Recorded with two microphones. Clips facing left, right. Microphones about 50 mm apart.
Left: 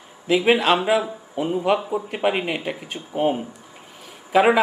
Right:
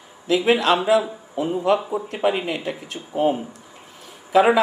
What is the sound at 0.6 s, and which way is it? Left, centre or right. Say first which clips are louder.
Speech: right 1 dB; centre.